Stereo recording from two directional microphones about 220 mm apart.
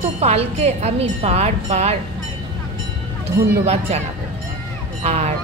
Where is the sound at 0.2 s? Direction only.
30° right (ahead or behind).